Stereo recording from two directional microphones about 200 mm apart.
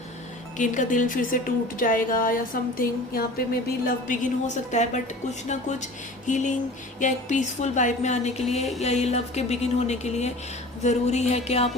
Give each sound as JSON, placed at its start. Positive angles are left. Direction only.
{"t": 0.5, "sound": "a woman's voice", "side_deg": 40}